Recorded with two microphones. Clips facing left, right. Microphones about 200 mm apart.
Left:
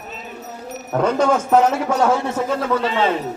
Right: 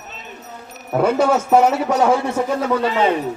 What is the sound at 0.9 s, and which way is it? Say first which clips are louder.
A man's voice: right 1 dB; 10° right (ahead or behind).